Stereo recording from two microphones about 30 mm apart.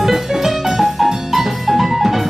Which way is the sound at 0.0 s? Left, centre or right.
Centre.